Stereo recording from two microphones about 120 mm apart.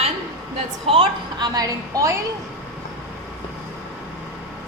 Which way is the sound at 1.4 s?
30° right (ahead or behind).